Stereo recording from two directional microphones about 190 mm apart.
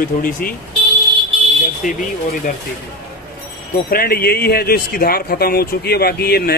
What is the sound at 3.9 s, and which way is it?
Speech, 50° left (ahead or behind).